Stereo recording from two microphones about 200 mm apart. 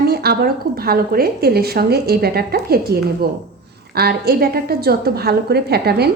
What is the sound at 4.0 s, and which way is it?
A woman's voice, 50° right (ahead or behind).